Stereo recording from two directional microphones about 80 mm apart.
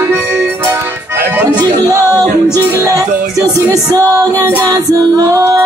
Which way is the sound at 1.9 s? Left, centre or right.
Right.